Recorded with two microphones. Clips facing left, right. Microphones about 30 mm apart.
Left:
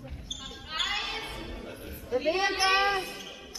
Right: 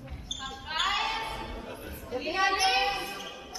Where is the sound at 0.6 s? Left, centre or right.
Centre.